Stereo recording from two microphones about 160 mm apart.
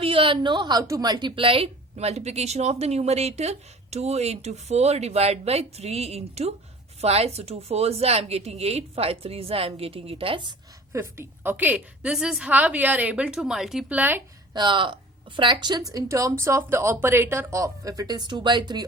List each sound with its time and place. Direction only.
0.0 s a woman's voice: 35° right (ahead or behind)
10.9 s a woman's voice: 15° right (ahead or behind)
14.5 s speech: 30° right (ahead or behind)